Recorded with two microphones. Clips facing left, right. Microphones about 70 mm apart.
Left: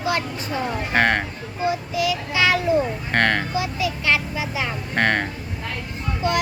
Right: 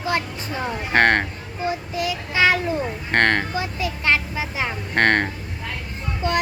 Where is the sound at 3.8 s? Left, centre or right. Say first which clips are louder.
Right 2 dB; right.